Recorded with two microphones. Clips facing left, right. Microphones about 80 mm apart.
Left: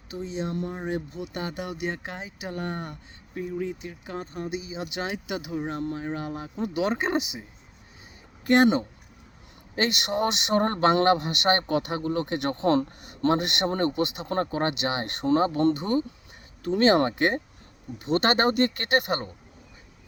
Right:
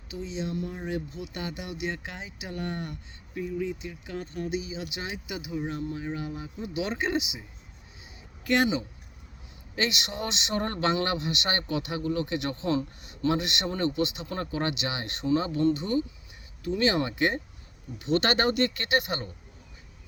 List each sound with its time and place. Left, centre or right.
0.1 s a man's voice: left
5.5 s a man's voice: left
8.4 s a man's voice: left
9.7 s a man's voice: left